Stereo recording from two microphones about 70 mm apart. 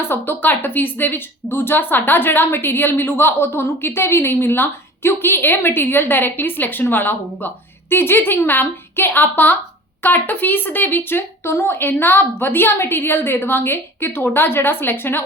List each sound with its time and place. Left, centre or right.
0.0 s a woman's voice: left